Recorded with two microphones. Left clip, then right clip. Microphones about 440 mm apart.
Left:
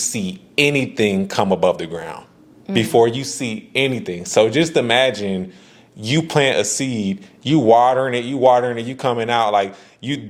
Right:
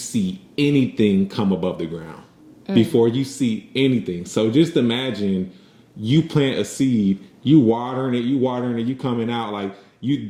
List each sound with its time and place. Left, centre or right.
0.1 s speech: left